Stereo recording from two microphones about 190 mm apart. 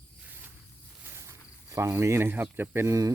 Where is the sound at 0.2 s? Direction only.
10° right (ahead or behind).